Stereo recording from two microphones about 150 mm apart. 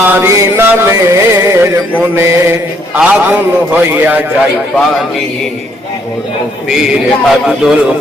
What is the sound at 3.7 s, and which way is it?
Music, 10° right (ahead or behind).